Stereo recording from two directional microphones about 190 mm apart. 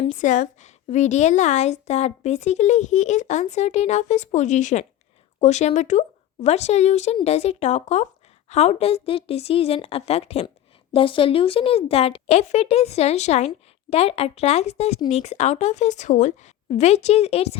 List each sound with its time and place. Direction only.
0.1 s a woman's voice: 40° left (ahead or behind)